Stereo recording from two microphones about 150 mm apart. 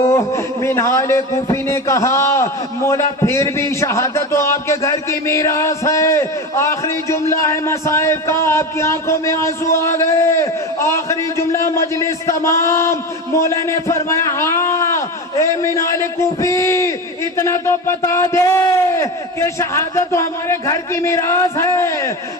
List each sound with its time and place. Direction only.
0.0 s a man's voice: 20° left (ahead or behind)